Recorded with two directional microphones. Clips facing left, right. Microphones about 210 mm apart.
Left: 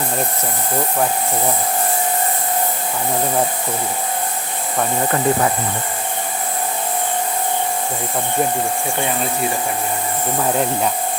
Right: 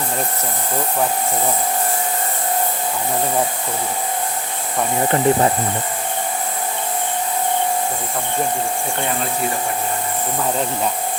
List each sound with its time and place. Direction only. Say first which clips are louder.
5.0 s speech: right 3 dB; 25° right (ahead or behind)